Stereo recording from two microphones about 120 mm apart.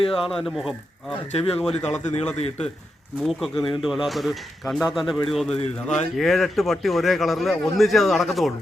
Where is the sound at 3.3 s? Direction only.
Centre (ahead or behind).